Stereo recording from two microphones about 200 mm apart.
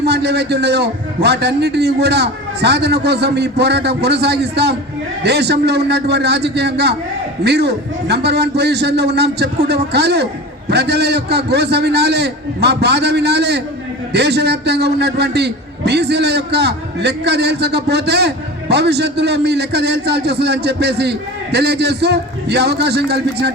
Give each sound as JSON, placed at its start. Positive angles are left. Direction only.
{"t": 0.0, "sound": "a man's voice", "side_deg": -55}